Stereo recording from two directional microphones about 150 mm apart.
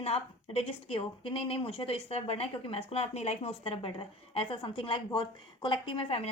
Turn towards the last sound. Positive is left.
turn(degrees=40)  # may be behind; listen again after turning